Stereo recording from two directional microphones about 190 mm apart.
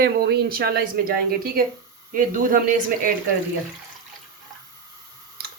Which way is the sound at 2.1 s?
45° right (ahead or behind).